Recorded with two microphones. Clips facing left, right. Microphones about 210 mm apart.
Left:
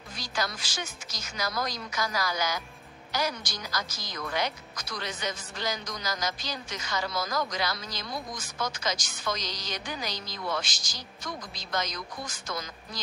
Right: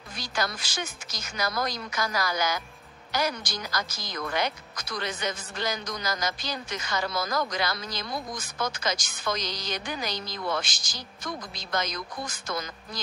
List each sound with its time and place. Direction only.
0.2 s a woman's voice: 55° right (ahead or behind)